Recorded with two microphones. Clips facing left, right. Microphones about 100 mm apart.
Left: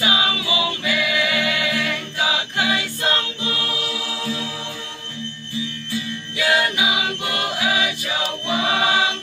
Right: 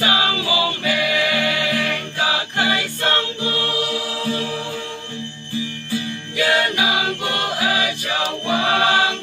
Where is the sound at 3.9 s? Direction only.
55° right (ahead or behind).